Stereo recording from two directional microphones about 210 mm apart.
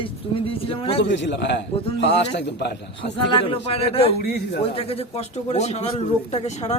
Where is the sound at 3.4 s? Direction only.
25° left (ahead or behind).